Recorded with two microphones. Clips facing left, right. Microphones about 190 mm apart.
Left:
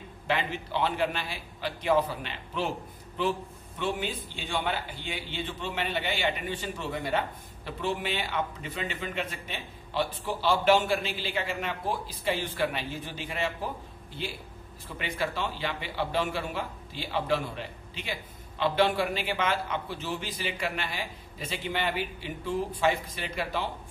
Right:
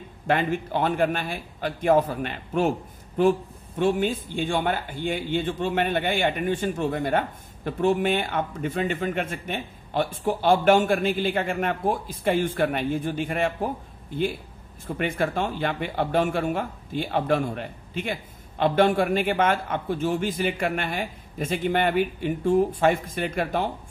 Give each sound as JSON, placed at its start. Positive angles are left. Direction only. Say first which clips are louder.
{"t": 0.3, "sound": "a man's voice", "louder": "right 6 dB", "side_deg": -50}
{"t": 14.9, "sound": "a man's voice", "louder": "right 7 dB", "side_deg": -50}